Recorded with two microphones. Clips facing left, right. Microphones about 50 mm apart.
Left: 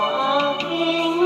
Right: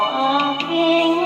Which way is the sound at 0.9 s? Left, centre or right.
Right.